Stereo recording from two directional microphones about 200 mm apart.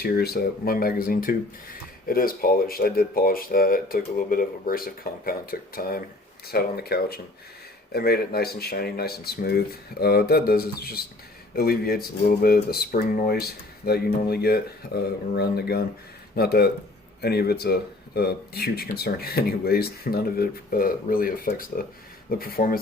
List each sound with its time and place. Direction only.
0.0 s speech: 50° left (ahead or behind)